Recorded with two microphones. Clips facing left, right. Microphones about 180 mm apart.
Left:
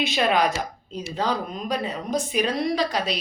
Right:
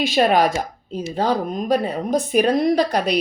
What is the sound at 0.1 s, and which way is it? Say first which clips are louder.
A woman's voice: right 7 dB; 45° right (ahead or behind).